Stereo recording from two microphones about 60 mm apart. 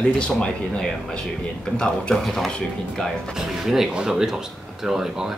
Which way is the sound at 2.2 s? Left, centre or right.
Centre.